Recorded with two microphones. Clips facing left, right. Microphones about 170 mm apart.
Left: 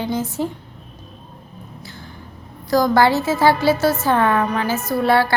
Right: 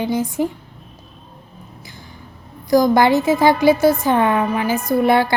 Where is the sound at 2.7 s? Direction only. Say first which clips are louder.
Right 2 dB; 15° right (ahead or behind).